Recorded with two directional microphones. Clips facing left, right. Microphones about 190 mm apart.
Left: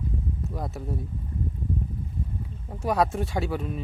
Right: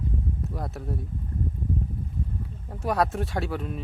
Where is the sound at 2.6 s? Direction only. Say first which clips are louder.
Left 1 dB; centre (ahead or behind).